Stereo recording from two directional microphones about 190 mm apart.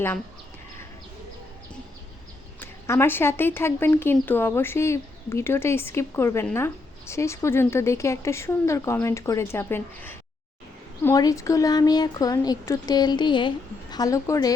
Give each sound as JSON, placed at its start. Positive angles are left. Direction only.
{"t": 2.6, "sound": "a woman's voice", "side_deg": 15}